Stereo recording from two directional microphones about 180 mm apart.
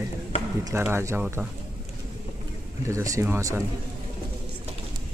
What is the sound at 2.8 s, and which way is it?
Speech, 15° right (ahead or behind).